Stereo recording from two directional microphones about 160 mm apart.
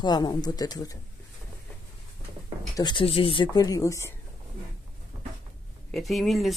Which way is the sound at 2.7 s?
30° left (ahead or behind).